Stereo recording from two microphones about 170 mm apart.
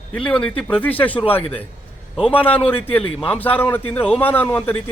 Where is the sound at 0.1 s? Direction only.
5° left (ahead or behind).